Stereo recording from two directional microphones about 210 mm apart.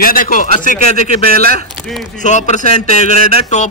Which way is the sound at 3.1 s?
40° right (ahead or behind).